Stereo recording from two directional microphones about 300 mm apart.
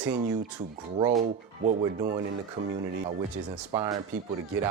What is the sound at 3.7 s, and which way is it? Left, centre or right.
Speech, centre.